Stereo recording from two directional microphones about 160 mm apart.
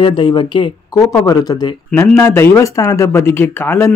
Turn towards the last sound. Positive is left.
turn(degrees=15)  # may be behind; listen again after turning